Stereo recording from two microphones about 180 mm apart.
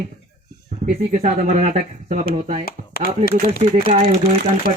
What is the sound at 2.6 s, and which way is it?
Speech, 55° left (ahead or behind).